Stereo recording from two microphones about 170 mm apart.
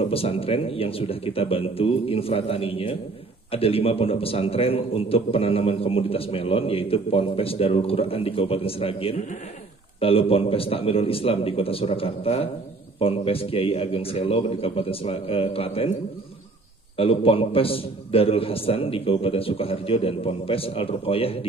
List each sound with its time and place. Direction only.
0.0 s a man's voice: 35° left (ahead or behind)
16.9 s a man's voice: 35° left (ahead or behind)